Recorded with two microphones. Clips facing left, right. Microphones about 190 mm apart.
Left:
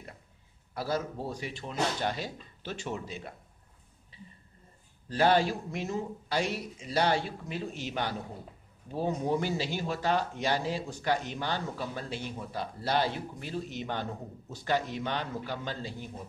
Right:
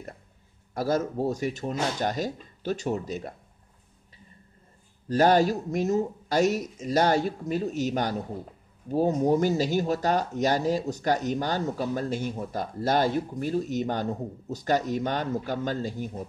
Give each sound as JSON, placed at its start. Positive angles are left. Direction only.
{"t": 0.7, "sound": "speech", "side_deg": -45}
{"t": 5.0, "sound": "speech", "side_deg": -45}